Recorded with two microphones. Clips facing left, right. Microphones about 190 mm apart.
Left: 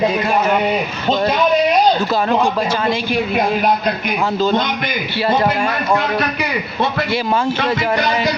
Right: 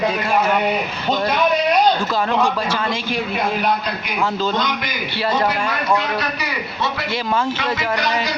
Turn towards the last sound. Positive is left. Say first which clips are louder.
# left 5 dB
turn(degrees=55)  # may be behind; listen again after turning